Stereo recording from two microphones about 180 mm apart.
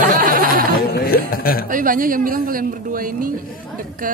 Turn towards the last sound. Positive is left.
turn(degrees=-50)  # may be behind; listen again after turning